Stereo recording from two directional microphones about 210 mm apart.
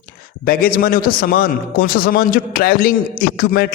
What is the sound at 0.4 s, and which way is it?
A man's voice, 45° left (ahead or behind).